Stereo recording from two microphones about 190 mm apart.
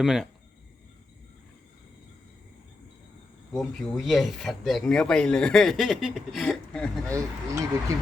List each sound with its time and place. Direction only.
0.0 s speech: centre (ahead or behind)
3.5 s speech: centre (ahead or behind)
7.1 s speech: 15° right (ahead or behind)